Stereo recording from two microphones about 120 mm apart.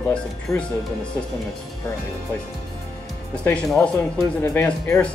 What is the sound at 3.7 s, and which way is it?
Speech, 10° left (ahead or behind).